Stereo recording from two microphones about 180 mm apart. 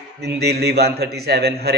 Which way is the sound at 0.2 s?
65° right (ahead or behind).